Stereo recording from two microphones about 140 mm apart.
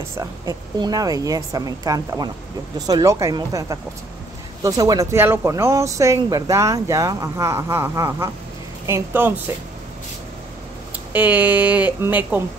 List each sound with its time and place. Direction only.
0.2 s speech: 25° right (ahead or behind)
11.1 s speech: 10° right (ahead or behind)